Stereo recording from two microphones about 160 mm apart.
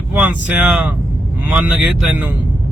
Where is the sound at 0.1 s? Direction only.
10° right (ahead or behind).